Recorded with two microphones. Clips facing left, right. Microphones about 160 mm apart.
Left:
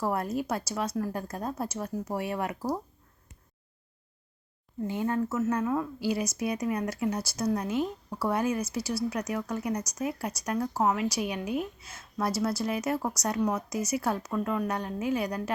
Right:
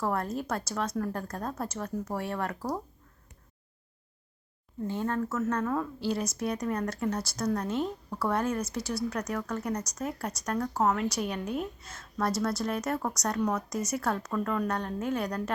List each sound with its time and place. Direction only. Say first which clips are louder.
0.0 s speech: left 1 dB; 10° left (ahead or behind)
4.9 s speech: left 2 dB; 10° left (ahead or behind)